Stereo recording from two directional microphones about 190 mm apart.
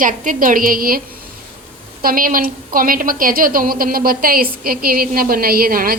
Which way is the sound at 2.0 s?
50° right (ahead or behind).